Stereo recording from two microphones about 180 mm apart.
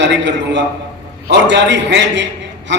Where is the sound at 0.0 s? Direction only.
80° right.